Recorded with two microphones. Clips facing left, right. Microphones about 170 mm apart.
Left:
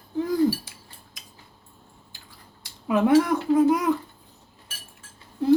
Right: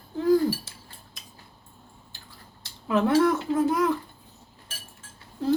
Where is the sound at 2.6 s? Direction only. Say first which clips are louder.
Left 2 dB; 15° left (ahead or behind).